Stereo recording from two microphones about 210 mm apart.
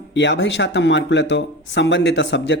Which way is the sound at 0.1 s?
60° left (ahead or behind).